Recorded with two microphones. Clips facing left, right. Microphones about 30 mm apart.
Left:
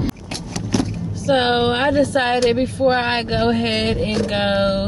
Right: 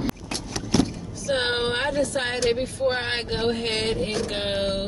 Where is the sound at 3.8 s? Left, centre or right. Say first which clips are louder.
Left 5 dB; left.